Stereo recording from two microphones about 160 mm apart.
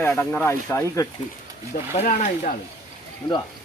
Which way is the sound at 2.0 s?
50° left (ahead or behind).